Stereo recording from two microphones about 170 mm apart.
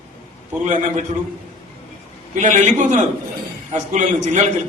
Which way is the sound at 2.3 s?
45° right (ahead or behind).